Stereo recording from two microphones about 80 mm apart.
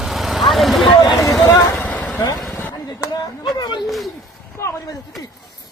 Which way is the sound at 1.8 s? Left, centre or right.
Centre.